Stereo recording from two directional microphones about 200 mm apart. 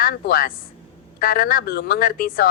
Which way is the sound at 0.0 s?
45° left (ahead or behind).